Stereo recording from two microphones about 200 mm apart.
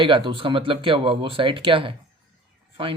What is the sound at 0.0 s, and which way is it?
Speech, 25° right (ahead or behind).